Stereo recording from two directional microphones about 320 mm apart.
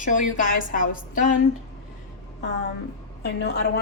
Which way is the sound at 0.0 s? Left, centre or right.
Left.